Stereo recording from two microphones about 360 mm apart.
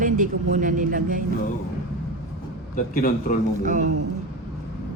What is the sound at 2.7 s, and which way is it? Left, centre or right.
Speech, left.